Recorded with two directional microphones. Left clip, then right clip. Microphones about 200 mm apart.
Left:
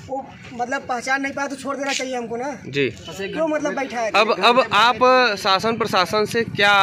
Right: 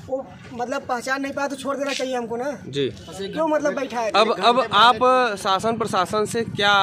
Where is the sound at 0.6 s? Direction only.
Centre (ahead or behind).